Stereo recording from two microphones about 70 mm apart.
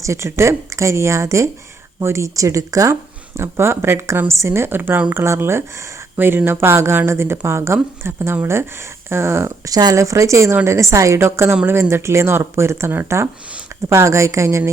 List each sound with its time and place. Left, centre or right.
0.0 s a woman's voice: right
2.9 s speech: right
5.1 s speech: right
9.6 s speech: right
10.0 s a woman's voice: right